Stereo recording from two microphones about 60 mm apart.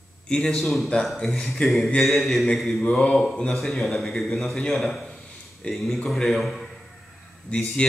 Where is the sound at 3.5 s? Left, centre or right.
Centre.